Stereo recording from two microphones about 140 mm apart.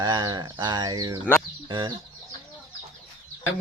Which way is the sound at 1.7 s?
30° right (ahead or behind).